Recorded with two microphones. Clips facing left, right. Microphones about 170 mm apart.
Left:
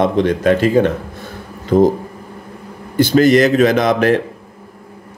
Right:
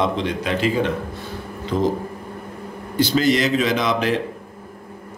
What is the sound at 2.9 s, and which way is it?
A man's voice, 50° left (ahead or behind).